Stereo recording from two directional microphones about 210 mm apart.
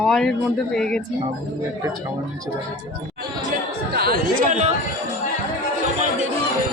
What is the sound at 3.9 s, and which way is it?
Speech, 45° right (ahead or behind).